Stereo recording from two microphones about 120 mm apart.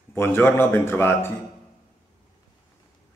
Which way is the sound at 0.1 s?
20° left (ahead or behind).